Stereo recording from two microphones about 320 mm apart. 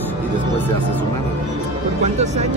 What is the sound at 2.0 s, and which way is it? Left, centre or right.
Speech, right.